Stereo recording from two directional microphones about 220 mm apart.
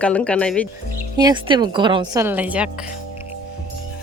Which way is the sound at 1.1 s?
20° right (ahead or behind).